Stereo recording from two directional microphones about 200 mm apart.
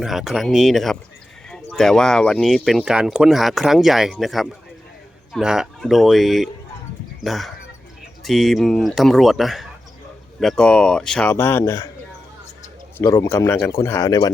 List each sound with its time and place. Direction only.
0.0 s speech: centre (ahead or behind); by 11.9 s 15° left (ahead or behind)
13.0 s speech: 15° left (ahead or behind)